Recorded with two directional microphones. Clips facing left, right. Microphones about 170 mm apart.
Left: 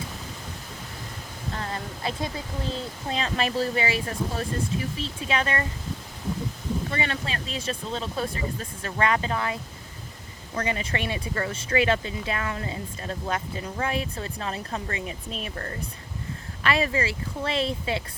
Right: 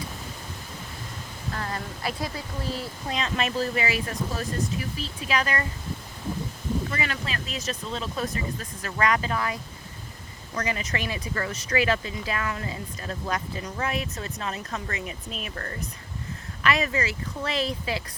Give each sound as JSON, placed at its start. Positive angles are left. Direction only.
{"t": 1.5, "sound": "a sound", "side_deg": 30}
{"t": 3.1, "sound": "speech", "side_deg": 35}
{"t": 6.9, "sound": "speech", "side_deg": 30}